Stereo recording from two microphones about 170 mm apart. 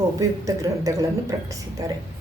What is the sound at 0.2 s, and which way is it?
Speech, 20° right (ahead or behind).